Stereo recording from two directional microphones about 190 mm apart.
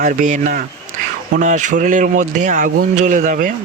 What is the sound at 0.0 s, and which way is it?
Speech, 40° right (ahead or behind).